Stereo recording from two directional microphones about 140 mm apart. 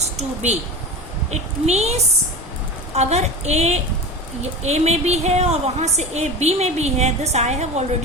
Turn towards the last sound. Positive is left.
turn(degrees=-55)  # may be behind; listen again after turning